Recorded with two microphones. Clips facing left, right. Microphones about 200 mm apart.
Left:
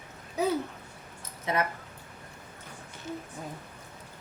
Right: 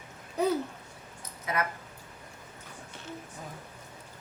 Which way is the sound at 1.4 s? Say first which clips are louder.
Left 3 dB; 25° left (ahead or behind).